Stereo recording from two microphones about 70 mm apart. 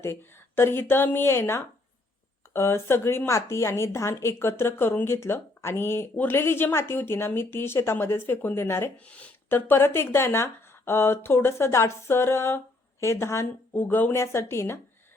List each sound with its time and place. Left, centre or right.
0.0 s speech: left
9.0 s speech: centre
9.5 s speech: left
13.7 s speech: left